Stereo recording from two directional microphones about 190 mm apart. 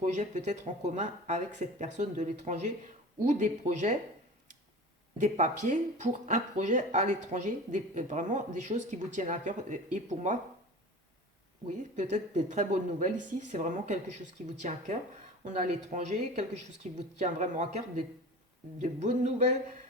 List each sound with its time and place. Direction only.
0.0 s speech: 40° right (ahead or behind)
5.2 s speech: 40° right (ahead or behind)
12.1 s speech: 40° right (ahead or behind)